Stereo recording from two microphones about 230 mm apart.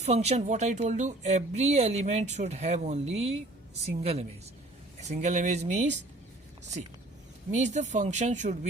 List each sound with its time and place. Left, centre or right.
0.0 s speech: right
7.5 s speech: right